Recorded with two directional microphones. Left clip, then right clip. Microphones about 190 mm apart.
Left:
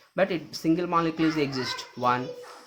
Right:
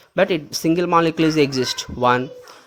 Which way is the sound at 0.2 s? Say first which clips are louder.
Right 8 dB; 45° right (ahead or behind).